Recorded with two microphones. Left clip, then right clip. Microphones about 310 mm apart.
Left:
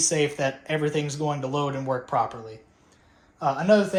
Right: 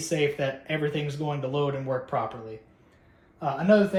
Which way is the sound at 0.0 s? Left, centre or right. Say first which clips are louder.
Left 2 dB; centre.